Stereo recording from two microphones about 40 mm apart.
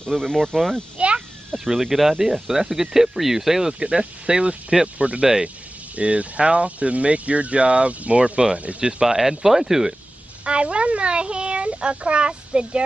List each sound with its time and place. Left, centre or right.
0.1 s speech: centre
0.9 s a sound: right
1.6 s speech: centre
3.8 s a child's voice: right
5.2 s a child's voice: right
5.9 s speech: right
9.0 s speech: centre
10.4 s a child's voice: right